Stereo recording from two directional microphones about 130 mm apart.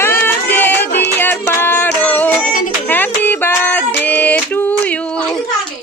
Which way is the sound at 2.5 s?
90° left.